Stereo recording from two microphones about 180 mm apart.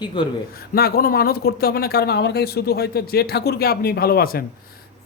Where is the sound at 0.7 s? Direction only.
60° left (ahead or behind).